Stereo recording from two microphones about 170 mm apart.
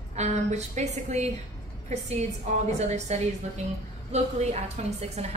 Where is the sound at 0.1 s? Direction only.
40° right (ahead or behind).